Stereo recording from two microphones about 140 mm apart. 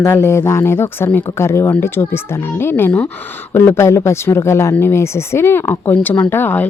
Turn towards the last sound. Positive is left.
turn(degrees=15)  # may be behind; listen again after turning